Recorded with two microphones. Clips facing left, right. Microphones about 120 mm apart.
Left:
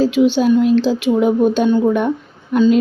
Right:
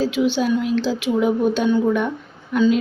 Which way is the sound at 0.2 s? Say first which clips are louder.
Left 7 dB; 25° left (ahead or behind).